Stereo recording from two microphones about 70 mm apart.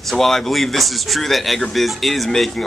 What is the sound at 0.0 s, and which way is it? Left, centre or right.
Speech, centre.